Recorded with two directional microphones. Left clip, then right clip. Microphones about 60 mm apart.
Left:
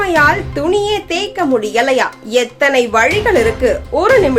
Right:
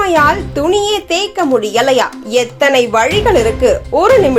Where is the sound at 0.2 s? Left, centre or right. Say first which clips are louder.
Right 1 dB; right.